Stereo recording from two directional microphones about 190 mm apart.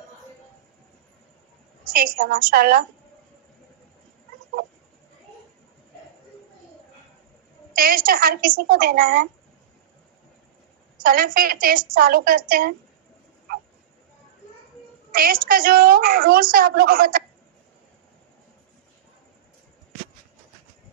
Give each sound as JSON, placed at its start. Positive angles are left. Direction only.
{"t": 1.9, "sound": "a woman's voice", "side_deg": -50}
{"t": 7.7, "sound": "a woman's voice", "side_deg": -50}
{"t": 11.0, "sound": "a woman's voice", "side_deg": -50}
{"t": 15.1, "sound": "a woman's voice", "side_deg": -50}